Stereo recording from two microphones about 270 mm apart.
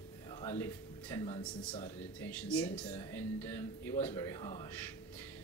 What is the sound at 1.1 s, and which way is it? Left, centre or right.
Speech, centre.